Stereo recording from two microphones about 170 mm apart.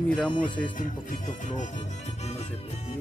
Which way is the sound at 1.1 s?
45° left (ahead or behind).